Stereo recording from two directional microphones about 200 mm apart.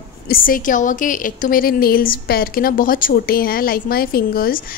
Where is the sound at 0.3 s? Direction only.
45° left (ahead or behind).